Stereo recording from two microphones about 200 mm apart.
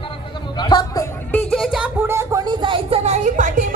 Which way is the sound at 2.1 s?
15° right (ahead or behind).